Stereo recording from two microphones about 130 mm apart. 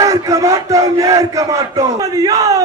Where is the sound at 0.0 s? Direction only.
25° right (ahead or behind).